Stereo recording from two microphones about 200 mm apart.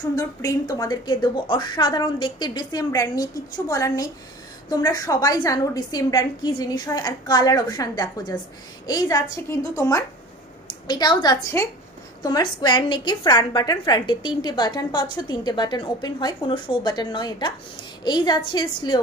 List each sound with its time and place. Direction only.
0.1 s a woman's voice: 15° left (ahead or behind)